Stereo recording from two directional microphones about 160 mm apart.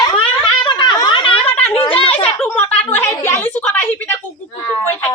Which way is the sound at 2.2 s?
10° left (ahead or behind).